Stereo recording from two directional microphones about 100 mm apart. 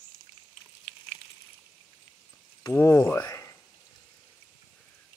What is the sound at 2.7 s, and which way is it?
Speech, 20° left (ahead or behind).